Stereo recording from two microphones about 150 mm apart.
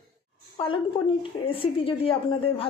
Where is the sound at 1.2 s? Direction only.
35° left (ahead or behind).